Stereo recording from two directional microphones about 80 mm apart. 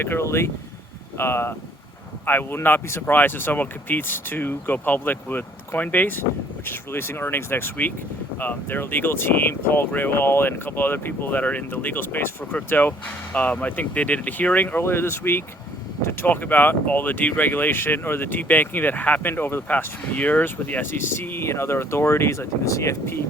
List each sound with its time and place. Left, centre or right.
0.0 s speech: left